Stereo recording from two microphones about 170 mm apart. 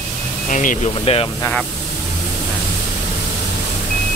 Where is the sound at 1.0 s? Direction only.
35° left (ahead or behind).